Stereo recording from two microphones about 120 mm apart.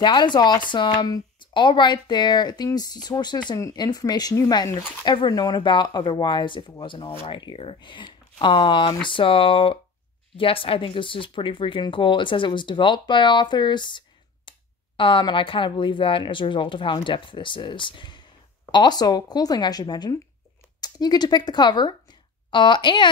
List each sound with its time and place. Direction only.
0.0 s speech: 40° left (ahead or behind)